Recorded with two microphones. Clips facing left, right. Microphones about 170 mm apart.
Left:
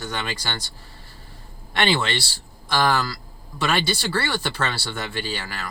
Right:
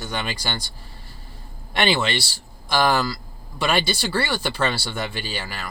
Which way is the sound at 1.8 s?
10° right (ahead or behind).